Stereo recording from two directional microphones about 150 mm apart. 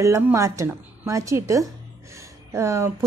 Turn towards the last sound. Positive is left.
turn(degrees=-20)  # may be behind; listen again after turning